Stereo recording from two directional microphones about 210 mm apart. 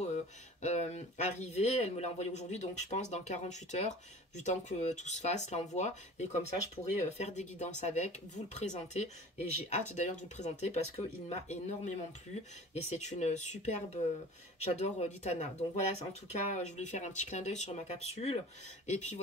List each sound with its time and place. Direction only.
0.0 s speech: 30° left (ahead or behind)